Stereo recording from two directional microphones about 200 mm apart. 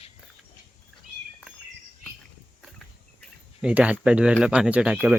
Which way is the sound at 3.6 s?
5° right (ahead or behind).